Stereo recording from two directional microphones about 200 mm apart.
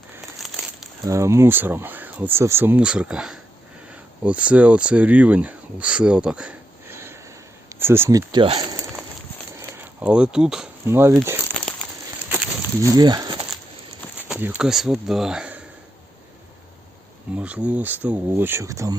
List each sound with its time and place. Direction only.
0.4 s crumpling: centre (ahead or behind)
1.0 s speech: 15° right (ahead or behind)
8.3 s speech: 25° right (ahead or behind)
10.0 s speech: 5° right (ahead or behind)
11.6 s crumpling: 5° left (ahead or behind)
13.0 s a sound: 20° right (ahead or behind)
14.3 s speech: 10° right (ahead or behind)
17.3 s speech: 5° right (ahead or behind)